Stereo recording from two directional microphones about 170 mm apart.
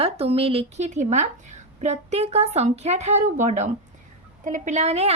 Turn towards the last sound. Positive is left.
turn(degrees=-40)  # may be behind; listen again after turning